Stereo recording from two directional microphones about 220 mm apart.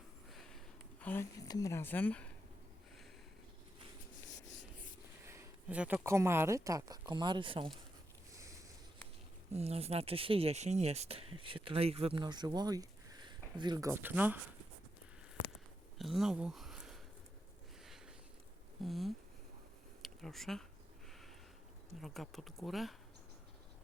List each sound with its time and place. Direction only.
0.3 s a sound: centre (ahead or behind)
1.0 s speech: 10° left (ahead or behind)
5.2 s speech: 10° right (ahead or behind)
9.5 s speech: 30° right (ahead or behind); by 14.3 s 10° right (ahead or behind)
16.0 s a sound: centre (ahead or behind)
18.8 s speech: centre (ahead or behind)
22.0 s speech: centre (ahead or behind)